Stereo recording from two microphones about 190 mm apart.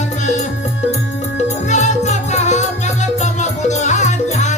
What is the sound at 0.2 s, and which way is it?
Music, 35° left (ahead or behind).